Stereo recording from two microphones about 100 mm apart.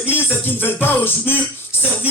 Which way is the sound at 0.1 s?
20° left (ahead or behind).